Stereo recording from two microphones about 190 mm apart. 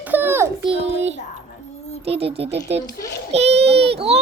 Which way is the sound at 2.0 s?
30° right (ahead or behind).